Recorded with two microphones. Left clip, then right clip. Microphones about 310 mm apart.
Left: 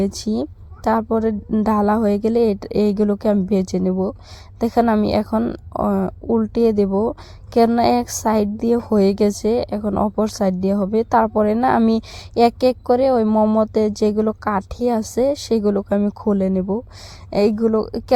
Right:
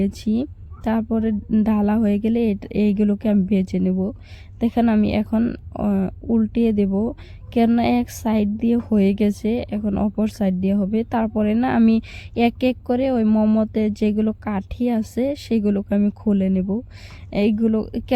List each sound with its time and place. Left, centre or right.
0.0 s a woman's voice: centre
2.8 s speech: centre
3.5 s a woman's voice: centre
7.6 s speech: centre
7.9 s a woman's voice: centre
12.9 s speech: centre